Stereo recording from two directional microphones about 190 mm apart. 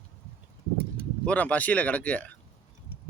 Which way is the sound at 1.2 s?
5° left (ahead or behind).